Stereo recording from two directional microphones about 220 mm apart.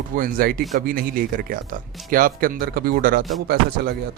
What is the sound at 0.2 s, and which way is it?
Speech, 40° right (ahead or behind).